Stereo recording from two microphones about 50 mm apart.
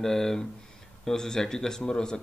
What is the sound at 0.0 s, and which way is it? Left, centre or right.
Speech, centre.